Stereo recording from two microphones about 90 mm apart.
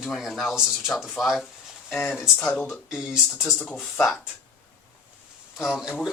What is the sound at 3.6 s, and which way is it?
Speech, 15° left (ahead or behind).